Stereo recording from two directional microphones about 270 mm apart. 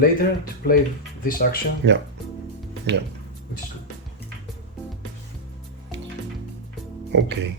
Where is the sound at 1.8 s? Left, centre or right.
Right.